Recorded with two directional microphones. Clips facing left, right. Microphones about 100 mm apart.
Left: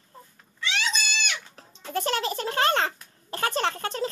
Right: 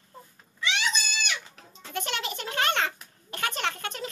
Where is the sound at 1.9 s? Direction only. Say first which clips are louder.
Left 6 dB; 35° left (ahead or behind).